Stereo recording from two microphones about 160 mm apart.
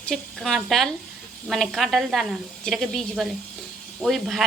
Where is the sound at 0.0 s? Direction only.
Centre (ahead or behind).